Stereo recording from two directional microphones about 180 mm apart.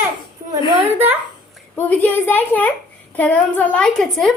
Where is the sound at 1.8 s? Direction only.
10° left (ahead or behind).